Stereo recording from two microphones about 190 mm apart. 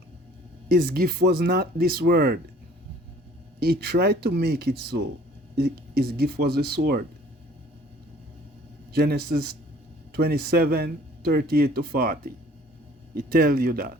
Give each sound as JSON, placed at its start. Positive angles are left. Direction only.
{"t": 0.7, "sound": "a man's voice", "side_deg": -55}
{"t": 3.6, "sound": "a man's voice", "side_deg": -55}
{"t": 8.9, "sound": "a man's voice", "side_deg": -55}